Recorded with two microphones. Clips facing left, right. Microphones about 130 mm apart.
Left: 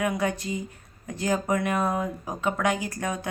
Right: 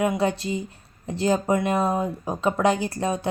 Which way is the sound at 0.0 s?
25° right (ahead or behind).